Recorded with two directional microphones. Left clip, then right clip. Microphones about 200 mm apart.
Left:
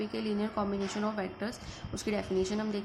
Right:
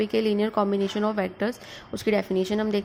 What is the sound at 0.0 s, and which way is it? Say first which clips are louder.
A woman's voice: right 11 dB; 40° right (ahead or behind).